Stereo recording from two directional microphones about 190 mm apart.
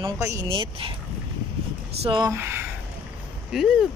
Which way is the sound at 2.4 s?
10° right (ahead or behind).